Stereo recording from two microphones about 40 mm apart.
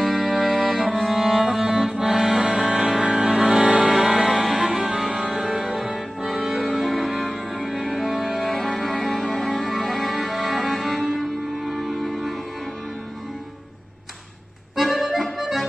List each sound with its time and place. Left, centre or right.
0.0 s music: centre
0.9 s music: centre; by 3.3 s right
3.3 s music: centre
3.6 s music: right
3.9 s music: centre
14.8 s accordion: centre